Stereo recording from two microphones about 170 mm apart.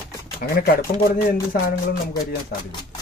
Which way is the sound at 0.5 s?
60° left (ahead or behind).